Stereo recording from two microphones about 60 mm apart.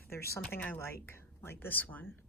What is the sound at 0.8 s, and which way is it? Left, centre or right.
Speech, left.